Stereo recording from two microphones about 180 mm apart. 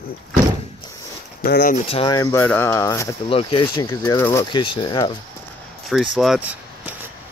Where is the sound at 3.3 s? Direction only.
30° left (ahead or behind).